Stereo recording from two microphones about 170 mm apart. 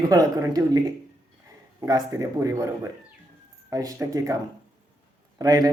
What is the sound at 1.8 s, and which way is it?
Speech, 20° right (ahead or behind).